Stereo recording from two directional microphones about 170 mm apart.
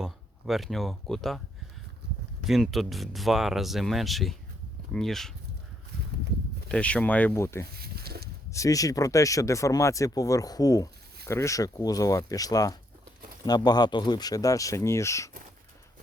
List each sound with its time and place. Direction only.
0.0 s speech: centre (ahead or behind)
2.5 s speech: centre (ahead or behind)
6.7 s speech: 5° left (ahead or behind)
7.8 s a sound: 65° right (ahead or behind)
8.4 s speech: 20° left (ahead or behind)